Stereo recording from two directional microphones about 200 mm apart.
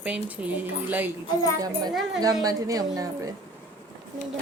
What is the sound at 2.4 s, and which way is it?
Speech, 20° right (ahead or behind).